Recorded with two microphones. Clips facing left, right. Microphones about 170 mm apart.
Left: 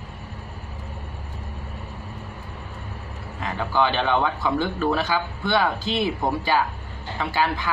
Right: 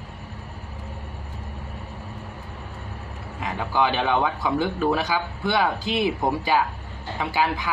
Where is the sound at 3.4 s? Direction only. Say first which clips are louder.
Left 1 dB; 15° right (ahead or behind).